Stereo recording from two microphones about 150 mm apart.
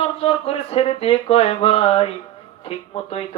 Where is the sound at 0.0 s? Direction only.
40° left (ahead or behind).